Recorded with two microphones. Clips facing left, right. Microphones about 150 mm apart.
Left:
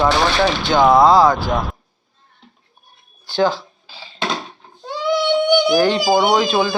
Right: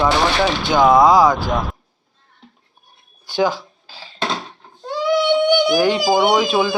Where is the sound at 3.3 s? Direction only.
15° right (ahead or behind).